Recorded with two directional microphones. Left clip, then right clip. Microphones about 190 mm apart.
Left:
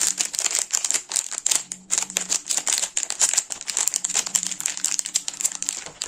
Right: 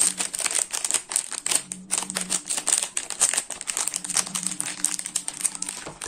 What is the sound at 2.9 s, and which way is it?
Crumpling, 15° left (ahead or behind).